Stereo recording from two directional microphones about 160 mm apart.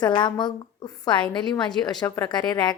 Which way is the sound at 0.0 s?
30° left (ahead or behind).